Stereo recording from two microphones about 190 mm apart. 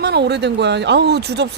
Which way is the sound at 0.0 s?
60° right (ahead or behind).